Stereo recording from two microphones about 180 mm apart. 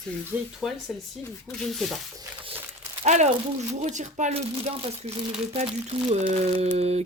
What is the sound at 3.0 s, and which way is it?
Speech, 40° right (ahead or behind).